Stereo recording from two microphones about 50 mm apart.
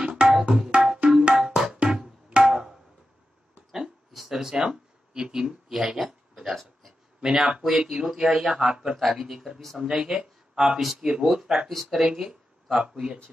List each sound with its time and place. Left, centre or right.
0.0 s tabla: centre
1.2 s music: centre
2.2 s tabla: centre
4.1 s a sound: centre
4.6 s a man's voice: centre